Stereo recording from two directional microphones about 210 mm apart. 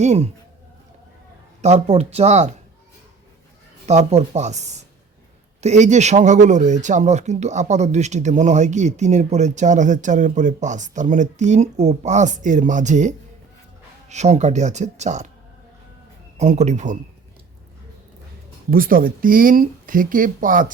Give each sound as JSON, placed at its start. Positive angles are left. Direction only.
{"t": 0.0, "sound": "a man's voice", "side_deg": -30}
{"t": 1.6, "sound": "a man's voice", "side_deg": -30}
{"t": 3.8, "sound": "a man's voice", "side_deg": -30}
{"t": 16.4, "sound": "a man's voice", "side_deg": -35}
{"t": 18.7, "sound": "a man's voice", "side_deg": -45}